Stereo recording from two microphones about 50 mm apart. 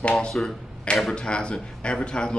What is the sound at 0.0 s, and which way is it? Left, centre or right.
Speech, centre.